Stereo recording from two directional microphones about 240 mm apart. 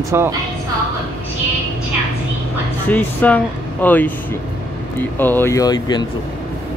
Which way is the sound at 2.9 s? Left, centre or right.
Centre.